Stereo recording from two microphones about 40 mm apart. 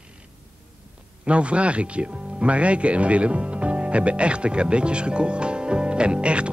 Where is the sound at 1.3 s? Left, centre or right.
Right.